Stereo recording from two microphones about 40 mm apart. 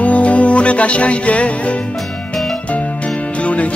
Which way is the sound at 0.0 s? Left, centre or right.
Left.